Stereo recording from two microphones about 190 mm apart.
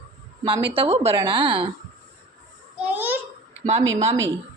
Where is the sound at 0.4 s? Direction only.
25° right (ahead or behind).